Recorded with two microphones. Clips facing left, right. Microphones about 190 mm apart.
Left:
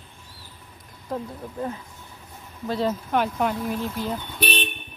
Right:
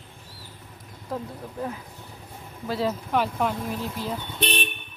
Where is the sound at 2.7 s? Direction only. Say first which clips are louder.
Left 1 dB; 5° right (ahead or behind).